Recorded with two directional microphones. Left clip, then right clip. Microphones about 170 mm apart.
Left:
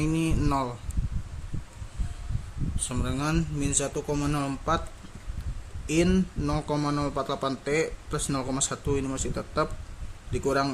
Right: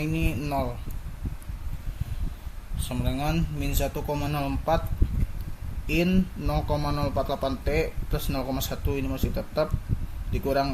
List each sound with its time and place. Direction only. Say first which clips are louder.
0.0 s a sound: left 2 dB; 30° left (ahead or behind)
2.9 s a man's voice: right 1 dB; 25° left (ahead or behind)
5.9 s a man's voice: left 1 dB; 30° left (ahead or behind)